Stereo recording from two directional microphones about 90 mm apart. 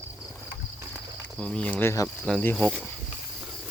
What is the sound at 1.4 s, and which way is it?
Speech, 10° left (ahead or behind).